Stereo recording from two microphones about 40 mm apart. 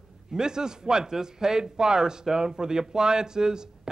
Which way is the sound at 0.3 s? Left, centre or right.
Centre.